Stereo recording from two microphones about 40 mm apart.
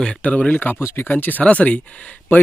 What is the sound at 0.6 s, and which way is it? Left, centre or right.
Speech, left.